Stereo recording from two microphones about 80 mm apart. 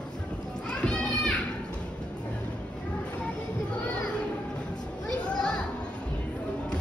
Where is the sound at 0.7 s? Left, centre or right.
Centre.